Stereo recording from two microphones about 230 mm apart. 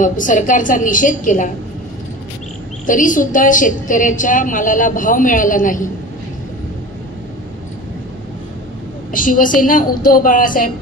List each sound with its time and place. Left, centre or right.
0.0 s a woman's voice: left
2.9 s a woman's voice: left
9.1 s a woman's voice: left